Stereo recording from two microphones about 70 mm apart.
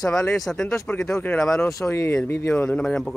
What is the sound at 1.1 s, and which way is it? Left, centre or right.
Speech, left.